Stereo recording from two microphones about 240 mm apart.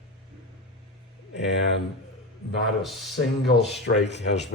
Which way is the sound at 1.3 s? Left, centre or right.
Left.